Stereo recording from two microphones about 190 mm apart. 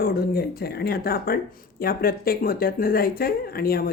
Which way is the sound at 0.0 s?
55° left (ahead or behind).